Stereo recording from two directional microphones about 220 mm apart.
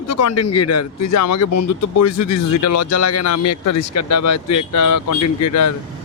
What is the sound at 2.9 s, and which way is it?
Speech, 90° left.